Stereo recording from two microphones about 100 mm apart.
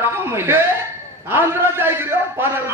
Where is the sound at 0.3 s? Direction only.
25° right (ahead or behind).